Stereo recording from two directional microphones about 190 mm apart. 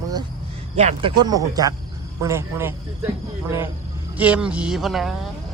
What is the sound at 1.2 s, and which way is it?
Speech, 20° right (ahead or behind).